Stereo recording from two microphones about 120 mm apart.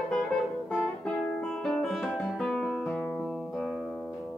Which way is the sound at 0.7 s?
Centre (ahead or behind).